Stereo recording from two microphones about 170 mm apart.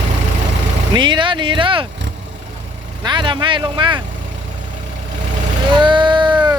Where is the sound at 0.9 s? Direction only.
30° right (ahead or behind).